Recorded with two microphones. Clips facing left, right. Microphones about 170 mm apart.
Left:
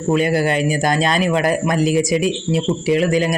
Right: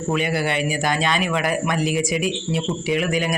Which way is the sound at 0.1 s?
40° left (ahead or behind).